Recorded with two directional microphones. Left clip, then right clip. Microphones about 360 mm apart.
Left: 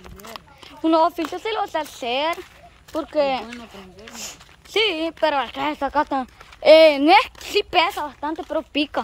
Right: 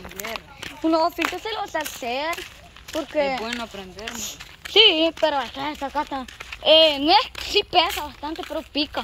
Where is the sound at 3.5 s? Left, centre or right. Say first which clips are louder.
Right 7 dB; centre.